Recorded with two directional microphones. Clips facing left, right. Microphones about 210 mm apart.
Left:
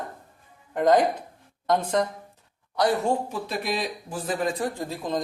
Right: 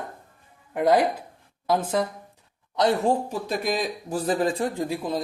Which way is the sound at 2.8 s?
25° right (ahead or behind).